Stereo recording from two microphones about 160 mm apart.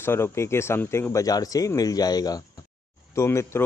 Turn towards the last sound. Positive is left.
turn(degrees=15)  # may be behind; listen again after turning